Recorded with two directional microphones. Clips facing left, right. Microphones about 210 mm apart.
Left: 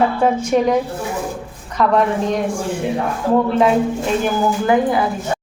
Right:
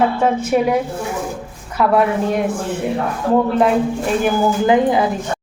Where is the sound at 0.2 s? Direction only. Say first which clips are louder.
Even; 5° right (ahead or behind).